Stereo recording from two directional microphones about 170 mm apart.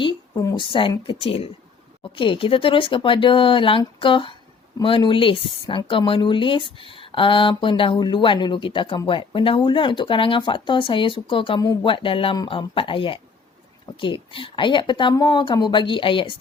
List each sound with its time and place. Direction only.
0.0 s speech: 25° left (ahead or behind)